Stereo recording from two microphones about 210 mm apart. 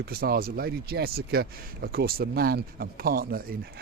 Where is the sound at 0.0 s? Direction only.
45° right (ahead or behind).